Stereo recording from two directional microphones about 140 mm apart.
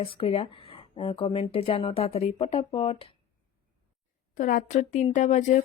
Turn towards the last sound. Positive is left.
turn(degrees=60)  # may be behind; listen again after turning